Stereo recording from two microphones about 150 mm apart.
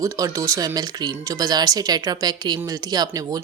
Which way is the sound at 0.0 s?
20° right (ahead or behind).